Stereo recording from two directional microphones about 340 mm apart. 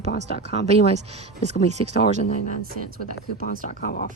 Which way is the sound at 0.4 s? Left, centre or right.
Centre.